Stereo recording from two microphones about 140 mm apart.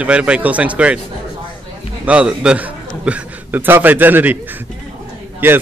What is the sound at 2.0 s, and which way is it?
A man's voice, 10° right (ahead or behind).